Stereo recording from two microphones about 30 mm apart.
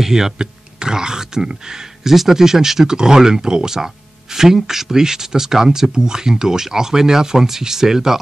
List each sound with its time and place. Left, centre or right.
0.0 s speech: centre
0.4 s speech: right